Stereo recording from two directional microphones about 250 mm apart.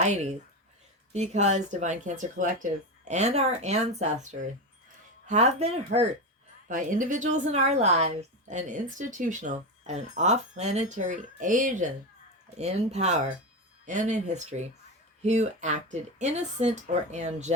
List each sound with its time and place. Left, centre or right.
0.0 s speech: right